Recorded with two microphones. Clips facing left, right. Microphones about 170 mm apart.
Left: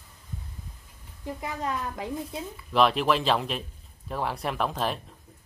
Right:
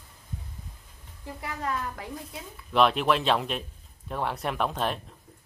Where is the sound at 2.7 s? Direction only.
Centre (ahead or behind).